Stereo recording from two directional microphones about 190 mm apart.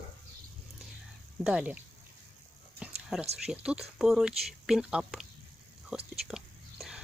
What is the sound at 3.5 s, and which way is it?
Speech, 5° right (ahead or behind).